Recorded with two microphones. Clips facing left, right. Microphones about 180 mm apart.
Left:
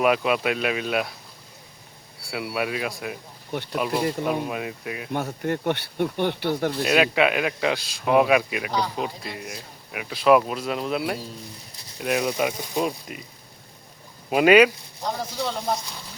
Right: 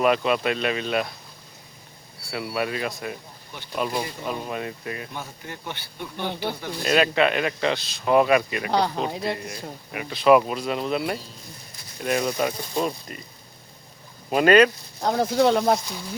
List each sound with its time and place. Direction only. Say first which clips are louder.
0.0 s speech: even; 5° left (ahead or behind)
2.3 s speech: even; 5° left (ahead or behind)
4.0 s speech: left 7 dB; 60° left (ahead or behind)
4.4 s speech: left 1 dB; 5° left (ahead or behind)
5.1 s speech: left 10 dB; 60° left (ahead or behind)
6.8 s speech: right 1 dB; 5° left (ahead or behind)
9.1 s speech: right 9 dB; 70° right (ahead or behind)
9.4 s speech: right 3 dB; 5° left (ahead or behind)
14.3 s speech: left 1 dB; 5° left (ahead or behind)
15.0 s speech: right 8 dB; 60° right (ahead or behind)